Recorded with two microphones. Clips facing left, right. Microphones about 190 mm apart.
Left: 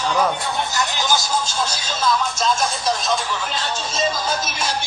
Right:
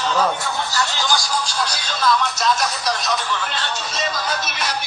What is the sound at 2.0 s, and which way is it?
Speech, 25° left (ahead or behind).